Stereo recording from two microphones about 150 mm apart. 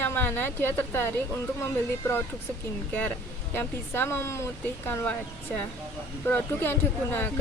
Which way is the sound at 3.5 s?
15° left (ahead or behind).